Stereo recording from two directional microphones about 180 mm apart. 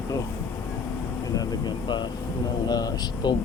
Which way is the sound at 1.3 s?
20° left (ahead or behind).